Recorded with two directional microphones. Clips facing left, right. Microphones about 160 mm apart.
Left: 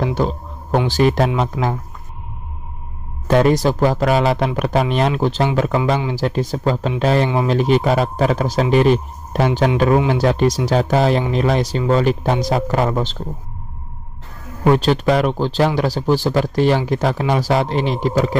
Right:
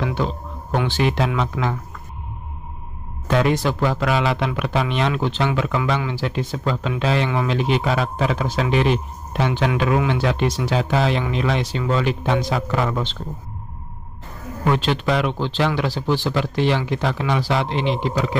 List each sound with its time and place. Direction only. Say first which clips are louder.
0.0 s a sound: left 4 dB; 40° left (ahead or behind)
0.8 s speech: left 5 dB; 40° left (ahead or behind)
3.3 s speech: left 5 dB; 40° left (ahead or behind)
14.7 s speech: left 5 dB; 40° left (ahead or behind)